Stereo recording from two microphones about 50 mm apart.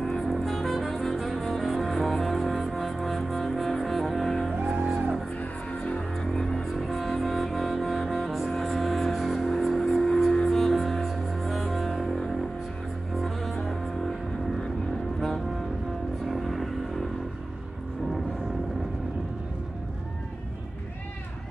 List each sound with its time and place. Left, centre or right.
0.0 s music: centre
4.7 s music: centre
5.9 s music: left
6.5 s music: centre
15.1 s foghorn: centre
16.3 s vehicle: centre